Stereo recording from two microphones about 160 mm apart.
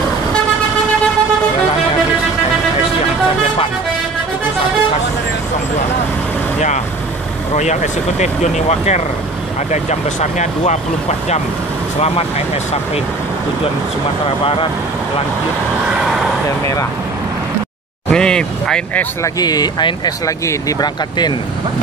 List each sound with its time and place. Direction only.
7.5 s speech: 50° left (ahead or behind)
10.4 s speech: 45° left (ahead or behind)
14.2 s speech: 35° left (ahead or behind)
16.4 s speech: 20° left (ahead or behind)
18.1 s speech: 5° left (ahead or behind)
19.2 s speech: 25° left (ahead or behind)